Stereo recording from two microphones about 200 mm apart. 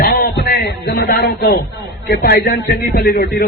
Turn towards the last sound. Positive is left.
turn(degrees=50)  # may be behind; listen again after turning